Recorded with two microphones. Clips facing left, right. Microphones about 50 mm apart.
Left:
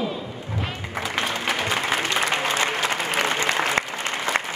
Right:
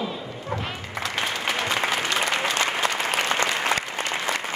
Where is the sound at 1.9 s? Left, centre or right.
Left.